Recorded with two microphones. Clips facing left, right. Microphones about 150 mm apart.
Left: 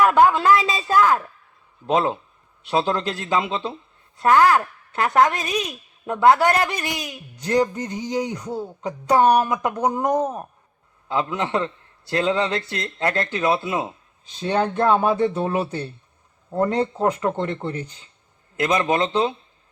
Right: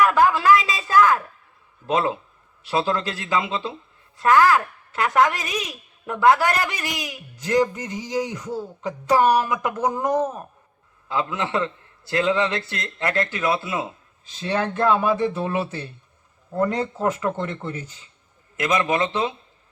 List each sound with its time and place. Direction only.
0.0 s a man's voice: 20° left (ahead or behind)